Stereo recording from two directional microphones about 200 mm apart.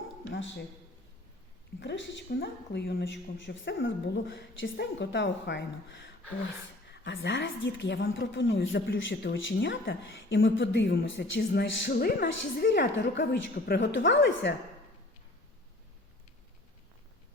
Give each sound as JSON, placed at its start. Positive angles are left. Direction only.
{"t": 0.3, "sound": "speech", "side_deg": 65}
{"t": 1.8, "sound": "speech", "side_deg": 60}